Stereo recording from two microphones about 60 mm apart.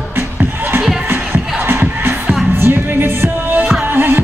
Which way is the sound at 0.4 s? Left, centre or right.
Right.